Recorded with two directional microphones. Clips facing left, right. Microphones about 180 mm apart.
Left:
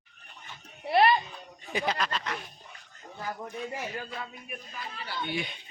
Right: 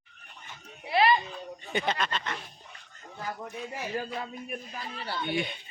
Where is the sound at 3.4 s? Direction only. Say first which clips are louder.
Left 1 dB; 5° right (ahead or behind).